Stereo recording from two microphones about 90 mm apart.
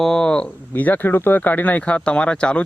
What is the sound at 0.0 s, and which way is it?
Speech, 5° left (ahead or behind).